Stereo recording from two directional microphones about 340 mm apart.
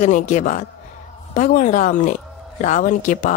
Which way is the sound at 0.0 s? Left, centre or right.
Left.